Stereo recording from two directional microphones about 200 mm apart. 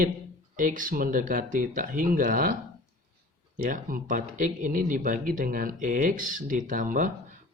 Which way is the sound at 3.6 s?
40° right (ahead or behind).